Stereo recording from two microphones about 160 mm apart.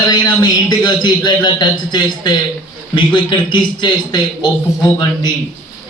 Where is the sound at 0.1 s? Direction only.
25° left (ahead or behind).